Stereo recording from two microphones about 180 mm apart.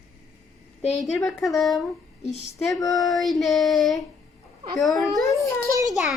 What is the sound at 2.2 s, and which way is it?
Speech, 40° left (ahead or behind).